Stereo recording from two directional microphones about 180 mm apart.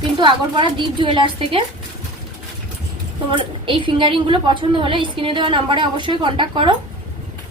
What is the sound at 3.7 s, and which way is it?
A woman's voice, 30° right (ahead or behind).